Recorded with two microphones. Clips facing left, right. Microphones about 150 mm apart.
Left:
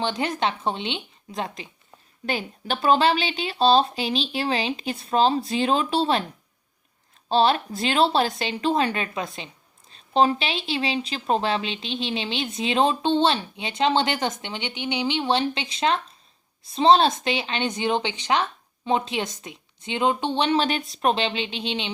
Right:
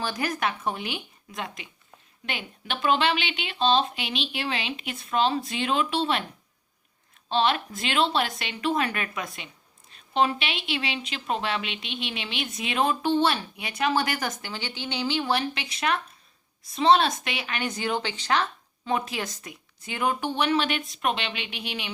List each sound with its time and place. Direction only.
0.0 s a woman's voice: 25° left (ahead or behind)
7.3 s a woman's voice: 35° left (ahead or behind)